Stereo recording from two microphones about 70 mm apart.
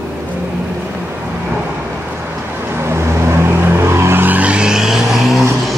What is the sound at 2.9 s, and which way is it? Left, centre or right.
Vehicle, right.